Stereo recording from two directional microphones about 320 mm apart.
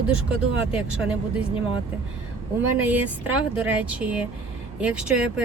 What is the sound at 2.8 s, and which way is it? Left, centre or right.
Speech, centre.